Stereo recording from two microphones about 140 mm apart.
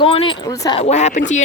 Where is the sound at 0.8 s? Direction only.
55° left (ahead or behind).